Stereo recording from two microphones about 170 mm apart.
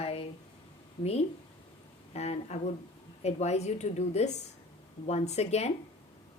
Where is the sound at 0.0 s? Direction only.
35° left (ahead or behind).